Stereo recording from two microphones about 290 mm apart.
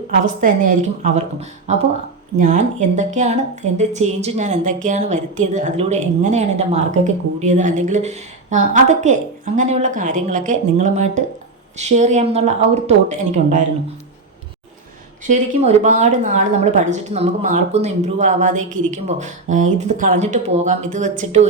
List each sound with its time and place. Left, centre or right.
0.4 s speech: right
15.3 s speech: right